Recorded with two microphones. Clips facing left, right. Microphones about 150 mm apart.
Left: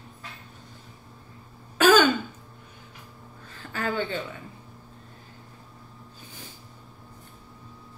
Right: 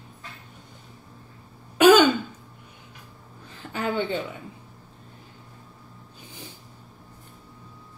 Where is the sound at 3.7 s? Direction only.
20° right (ahead or behind).